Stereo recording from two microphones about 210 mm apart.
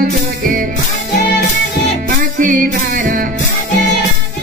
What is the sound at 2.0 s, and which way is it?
Music, 40° right (ahead or behind).